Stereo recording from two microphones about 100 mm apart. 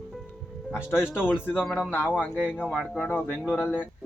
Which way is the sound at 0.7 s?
25° left (ahead or behind).